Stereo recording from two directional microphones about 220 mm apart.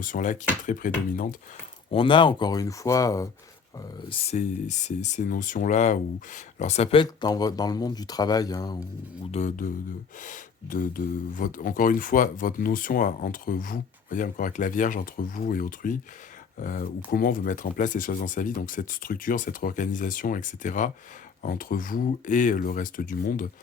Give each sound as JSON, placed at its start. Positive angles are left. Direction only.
{"t": 0.0, "sound": "speech", "side_deg": 35}
{"t": 1.9, "sound": "speech", "side_deg": 25}
{"t": 9.3, "sound": "speech", "side_deg": 35}